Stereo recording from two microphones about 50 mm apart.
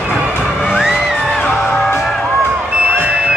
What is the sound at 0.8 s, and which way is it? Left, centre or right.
Music, centre.